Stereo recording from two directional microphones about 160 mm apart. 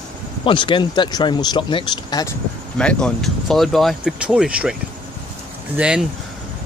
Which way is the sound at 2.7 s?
5° left (ahead or behind).